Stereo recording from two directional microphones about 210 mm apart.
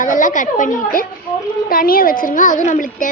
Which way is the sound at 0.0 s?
40° left (ahead or behind).